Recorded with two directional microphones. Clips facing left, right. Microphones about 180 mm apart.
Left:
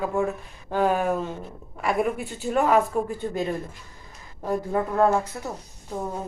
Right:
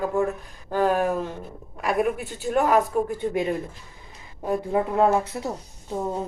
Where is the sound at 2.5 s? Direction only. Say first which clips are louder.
Even; centre (ahead or behind); by 5.5 s 15° right (ahead or behind).